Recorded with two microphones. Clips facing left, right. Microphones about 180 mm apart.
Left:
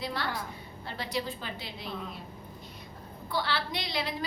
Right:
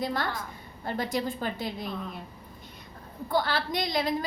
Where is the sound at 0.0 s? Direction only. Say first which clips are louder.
Right 4 dB; 45° right (ahead or behind).